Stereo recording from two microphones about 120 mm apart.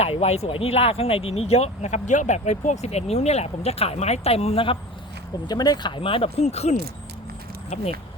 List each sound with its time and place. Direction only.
0.0 s speech: 60° left (ahead or behind); by 2.7 s 80° left
2.8 s speech: 65° left (ahead or behind); by 4.8 s 50° left (ahead or behind)
5.5 s speech: 35° left (ahead or behind); by 7.9 s 65° left (ahead or behind)